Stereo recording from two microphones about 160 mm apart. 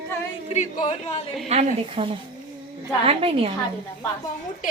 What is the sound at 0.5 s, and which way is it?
Speech, 45° left (ahead or behind).